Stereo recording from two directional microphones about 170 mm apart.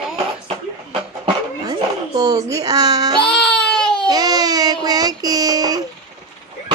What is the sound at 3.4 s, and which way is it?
Baby cry, 5° left (ahead or behind).